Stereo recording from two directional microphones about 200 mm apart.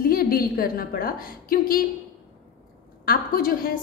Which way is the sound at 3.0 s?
45° left (ahead or behind).